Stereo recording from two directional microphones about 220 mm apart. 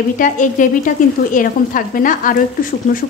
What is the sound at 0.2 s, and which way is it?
A woman's voice, 35° left (ahead or behind).